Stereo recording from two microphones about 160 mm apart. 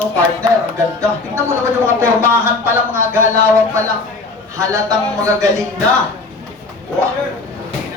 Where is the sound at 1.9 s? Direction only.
15° right (ahead or behind).